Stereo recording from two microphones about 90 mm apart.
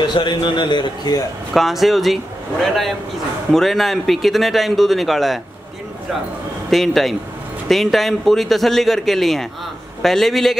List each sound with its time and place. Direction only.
0.0 s a man's voice: 55° left (ahead or behind)
1.5 s speech: centre (ahead or behind)
6.7 s speech: centre (ahead or behind)